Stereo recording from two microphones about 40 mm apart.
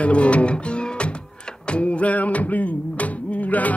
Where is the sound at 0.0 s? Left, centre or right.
Left.